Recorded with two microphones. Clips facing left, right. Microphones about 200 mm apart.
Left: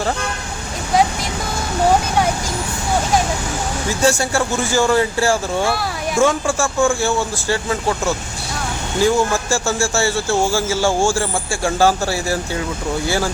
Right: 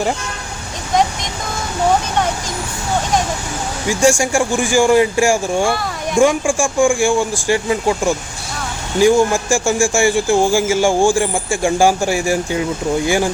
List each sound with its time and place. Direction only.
3.8 s speech: 15° right (ahead or behind)